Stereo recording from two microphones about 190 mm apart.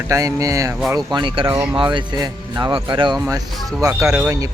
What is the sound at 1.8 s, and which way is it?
Speech, 25° right (ahead or behind).